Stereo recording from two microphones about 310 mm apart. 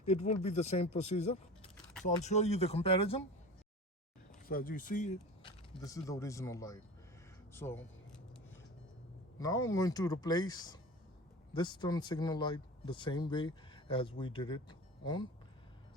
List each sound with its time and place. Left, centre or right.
0.0 s speech: left
4.4 s speech: left; by 7.9 s centre
9.4 s speech: centre